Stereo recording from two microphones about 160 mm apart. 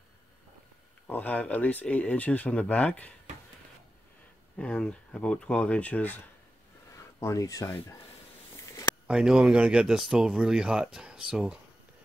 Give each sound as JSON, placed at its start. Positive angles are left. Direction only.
{"t": 1.0, "sound": "speech", "side_deg": 10}
{"t": 4.6, "sound": "speech", "side_deg": 5}
{"t": 9.0, "sound": "speech", "side_deg": -5}